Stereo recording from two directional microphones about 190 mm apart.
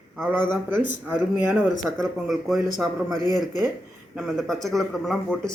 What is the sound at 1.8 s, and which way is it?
Speech, centre (ahead or behind).